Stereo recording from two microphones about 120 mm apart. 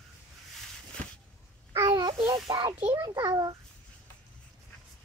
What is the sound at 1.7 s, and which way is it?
Babbling, 35° right (ahead or behind).